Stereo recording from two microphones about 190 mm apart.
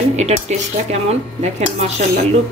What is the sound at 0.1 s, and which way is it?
Speech, 35° right (ahead or behind).